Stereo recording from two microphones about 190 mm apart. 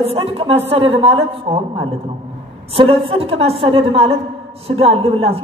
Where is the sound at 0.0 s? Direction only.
30° right (ahead or behind).